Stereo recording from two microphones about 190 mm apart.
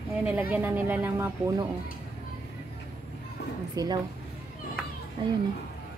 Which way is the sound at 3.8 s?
20° right (ahead or behind).